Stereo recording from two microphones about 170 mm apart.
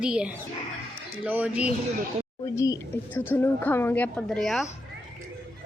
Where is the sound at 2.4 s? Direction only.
20° left (ahead or behind); by 4.6 s centre (ahead or behind).